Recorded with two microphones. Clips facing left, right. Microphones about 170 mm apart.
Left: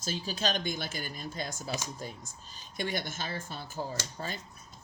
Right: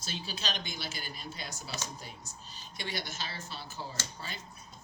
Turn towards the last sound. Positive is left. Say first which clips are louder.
# left 5 dB
turn(degrees=45)  # may be behind; listen again after turning